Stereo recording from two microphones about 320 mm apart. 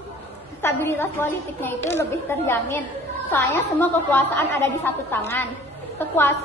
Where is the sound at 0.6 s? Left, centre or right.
Centre.